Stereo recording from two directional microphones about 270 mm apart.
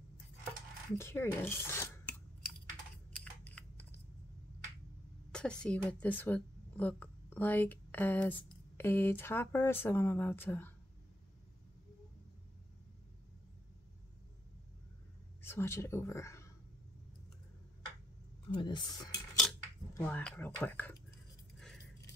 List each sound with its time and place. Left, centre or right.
0.9 s speech: centre
3.2 s scissors: centre
5.3 s a woman's voice: centre
15.4 s speech: centre
18.5 s speech: centre
18.9 s a sound: centre
19.9 s speech: centre